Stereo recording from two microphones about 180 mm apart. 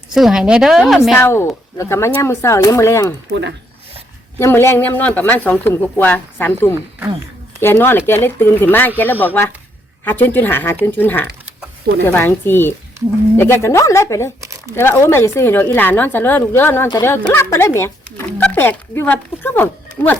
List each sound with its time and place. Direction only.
0.1 s a woman's voice: centre (ahead or behind)
1.2 s speech: 15° left (ahead or behind)
4.4 s speech: 15° left (ahead or behind)